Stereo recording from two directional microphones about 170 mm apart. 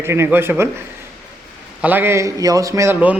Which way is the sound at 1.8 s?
10° right (ahead or behind).